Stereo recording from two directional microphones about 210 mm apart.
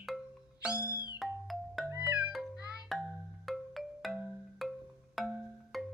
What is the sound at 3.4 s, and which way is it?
Marimba, centre (ahead or behind).